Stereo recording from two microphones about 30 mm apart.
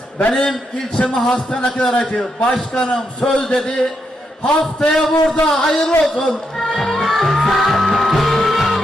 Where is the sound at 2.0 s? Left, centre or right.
Left.